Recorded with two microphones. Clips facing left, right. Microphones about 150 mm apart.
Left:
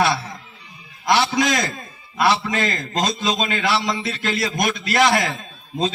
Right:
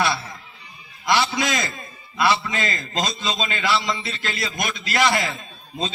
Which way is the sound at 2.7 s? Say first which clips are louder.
Left 3 dB; 65° left (ahead or behind).